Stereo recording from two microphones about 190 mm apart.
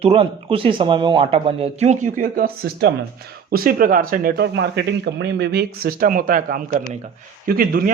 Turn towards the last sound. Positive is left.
turn(degrees=-50)  # may be behind; listen again after turning